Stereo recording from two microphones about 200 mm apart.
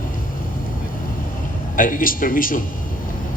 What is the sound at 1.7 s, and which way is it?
Speech, 45° left (ahead or behind).